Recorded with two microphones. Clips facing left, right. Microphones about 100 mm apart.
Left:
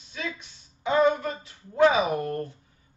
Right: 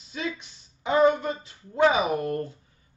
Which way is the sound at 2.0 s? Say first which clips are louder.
Even; 30° left (ahead or behind).